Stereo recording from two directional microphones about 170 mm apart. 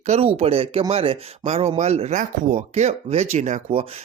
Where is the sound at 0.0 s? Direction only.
40° right (ahead or behind).